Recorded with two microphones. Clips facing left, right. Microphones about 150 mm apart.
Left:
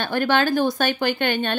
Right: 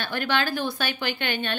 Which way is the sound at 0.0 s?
45° left (ahead or behind).